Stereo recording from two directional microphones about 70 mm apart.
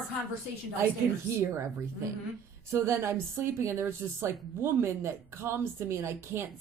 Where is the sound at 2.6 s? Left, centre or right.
Right.